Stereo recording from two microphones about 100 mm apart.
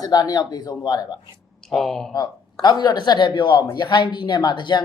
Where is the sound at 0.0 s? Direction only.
40° left (ahead or behind).